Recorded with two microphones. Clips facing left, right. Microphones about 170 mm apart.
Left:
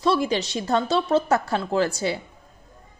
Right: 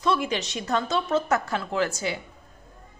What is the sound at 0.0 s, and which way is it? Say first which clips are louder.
A woman's voice: left 4 dB; 35° left (ahead or behind).